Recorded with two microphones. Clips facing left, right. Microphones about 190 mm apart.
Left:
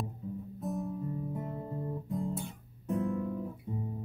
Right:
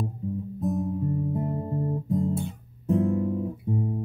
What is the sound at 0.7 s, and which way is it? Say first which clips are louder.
Guitar: right 8 dB; 30° right (ahead or behind).